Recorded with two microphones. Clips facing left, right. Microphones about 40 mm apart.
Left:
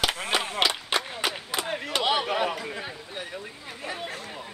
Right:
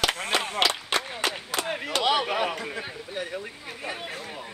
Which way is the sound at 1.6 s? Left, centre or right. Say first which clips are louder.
Right 1 dB; centre.